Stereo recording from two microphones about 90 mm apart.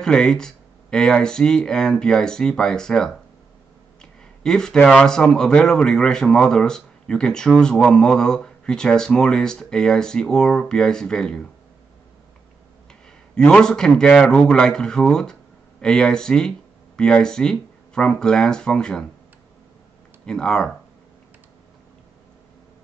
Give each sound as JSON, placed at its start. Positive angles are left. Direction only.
{"t": 0.0, "sound": "speech", "side_deg": 10}
{"t": 4.0, "sound": "a sound", "side_deg": 5}
{"t": 4.8, "sound": "speech", "side_deg": 5}
{"t": 13.3, "sound": "speech", "side_deg": 10}
{"t": 20.2, "sound": "speech", "side_deg": 10}